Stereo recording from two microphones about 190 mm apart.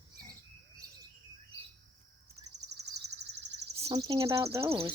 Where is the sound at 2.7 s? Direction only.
60° right (ahead or behind).